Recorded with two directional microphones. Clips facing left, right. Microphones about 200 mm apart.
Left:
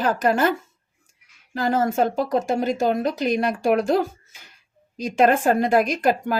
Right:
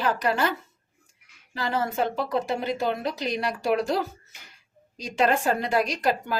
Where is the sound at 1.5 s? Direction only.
45° left (ahead or behind).